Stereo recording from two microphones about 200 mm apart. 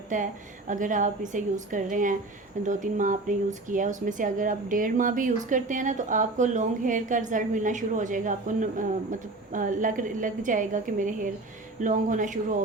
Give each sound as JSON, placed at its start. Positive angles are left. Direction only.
{"t": 0.1, "sound": "a woman's voice", "side_deg": -40}